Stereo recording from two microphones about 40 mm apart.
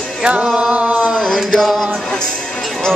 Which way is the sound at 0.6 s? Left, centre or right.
Right.